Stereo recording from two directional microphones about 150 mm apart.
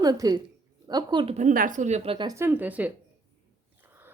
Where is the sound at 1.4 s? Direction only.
60° right (ahead or behind).